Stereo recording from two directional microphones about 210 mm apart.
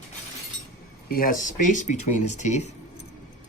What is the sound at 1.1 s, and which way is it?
Speech, 45° left (ahead or behind).